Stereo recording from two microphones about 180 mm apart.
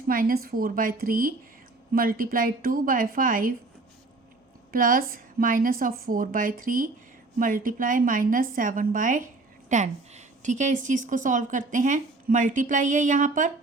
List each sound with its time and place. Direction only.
0.1 s a woman's voice: 55° right (ahead or behind)
4.7 s a woman's voice: 50° right (ahead or behind)